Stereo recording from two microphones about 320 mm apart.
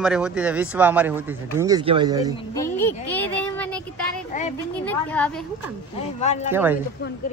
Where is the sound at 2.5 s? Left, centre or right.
Centre.